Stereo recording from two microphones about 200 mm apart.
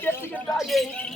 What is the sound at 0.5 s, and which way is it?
Speech, centre (ahead or behind).